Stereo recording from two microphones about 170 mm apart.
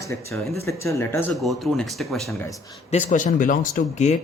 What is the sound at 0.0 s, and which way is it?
Speech, 15° left (ahead or behind).